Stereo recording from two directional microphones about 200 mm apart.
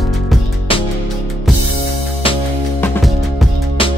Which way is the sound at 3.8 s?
25° left (ahead or behind).